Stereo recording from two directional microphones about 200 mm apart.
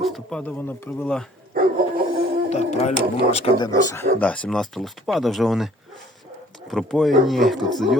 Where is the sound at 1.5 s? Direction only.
45° right (ahead or behind).